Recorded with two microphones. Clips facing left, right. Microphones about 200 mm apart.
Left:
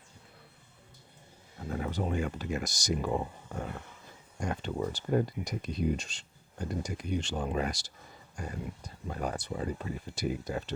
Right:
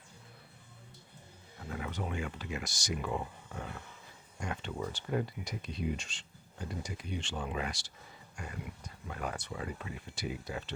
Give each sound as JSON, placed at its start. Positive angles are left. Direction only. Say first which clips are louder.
{"t": 1.7, "sound": "speech", "louder": "left 6 dB", "side_deg": 35}
{"t": 9.0, "sound": "speech", "louder": "left 5 dB", "side_deg": 35}